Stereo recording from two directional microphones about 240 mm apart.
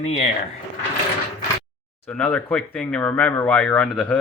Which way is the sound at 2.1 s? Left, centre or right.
Centre.